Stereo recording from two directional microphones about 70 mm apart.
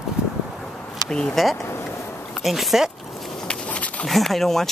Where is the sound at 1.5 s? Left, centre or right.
Left.